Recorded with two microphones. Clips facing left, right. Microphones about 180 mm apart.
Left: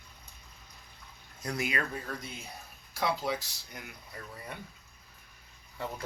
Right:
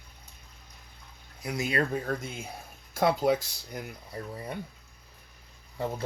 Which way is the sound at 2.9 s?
50° right (ahead or behind).